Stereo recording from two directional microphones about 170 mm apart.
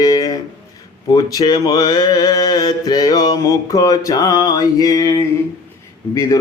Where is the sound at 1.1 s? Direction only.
25° left (ahead or behind).